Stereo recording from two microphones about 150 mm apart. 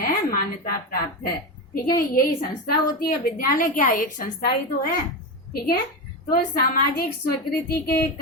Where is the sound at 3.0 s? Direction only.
80° left; by 4.3 s 60° left (ahead or behind).